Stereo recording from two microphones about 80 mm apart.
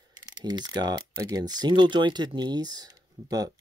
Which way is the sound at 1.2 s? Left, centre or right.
Right.